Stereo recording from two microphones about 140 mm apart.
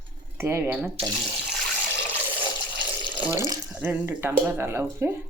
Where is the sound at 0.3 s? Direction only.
15° right (ahead or behind).